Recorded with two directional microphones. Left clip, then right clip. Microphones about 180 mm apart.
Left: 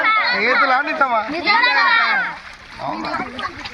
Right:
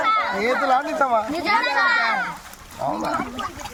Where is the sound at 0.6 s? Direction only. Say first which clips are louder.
Left 3 dB; 30° right (ahead or behind).